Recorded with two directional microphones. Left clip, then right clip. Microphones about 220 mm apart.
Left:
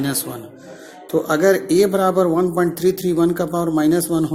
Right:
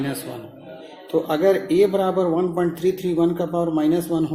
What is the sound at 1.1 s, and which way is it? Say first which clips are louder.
A man's voice: left 3 dB; 25° left (ahead or behind).